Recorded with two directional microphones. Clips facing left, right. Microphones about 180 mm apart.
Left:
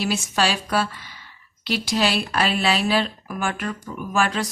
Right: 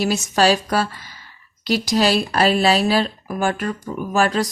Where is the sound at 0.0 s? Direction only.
40° right (ahead or behind).